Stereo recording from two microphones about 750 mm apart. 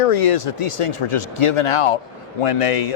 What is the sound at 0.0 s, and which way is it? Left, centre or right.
A man's voice, left.